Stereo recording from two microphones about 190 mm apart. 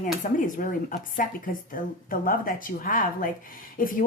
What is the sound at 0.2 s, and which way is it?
Speech, 45° left (ahead or behind).